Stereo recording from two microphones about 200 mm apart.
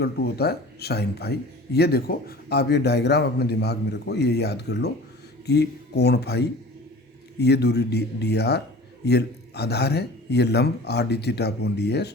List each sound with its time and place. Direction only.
0.0 s speech: 55° left (ahead or behind)